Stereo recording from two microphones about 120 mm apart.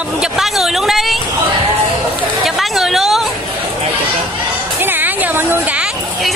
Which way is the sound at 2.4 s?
Centre (ahead or behind).